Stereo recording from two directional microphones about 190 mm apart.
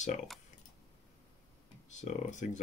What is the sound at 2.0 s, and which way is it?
Speech, 40° left (ahead or behind).